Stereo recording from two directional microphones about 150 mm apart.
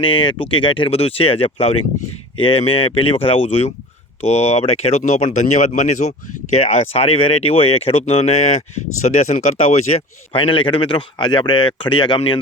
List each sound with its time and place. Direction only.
0.0 s a man's voice: 35° left (ahead or behind)
10.3 s a man's voice: 35° left (ahead or behind)